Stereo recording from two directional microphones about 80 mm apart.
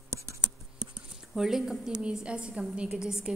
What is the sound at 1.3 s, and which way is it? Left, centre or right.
A woman's voice, centre.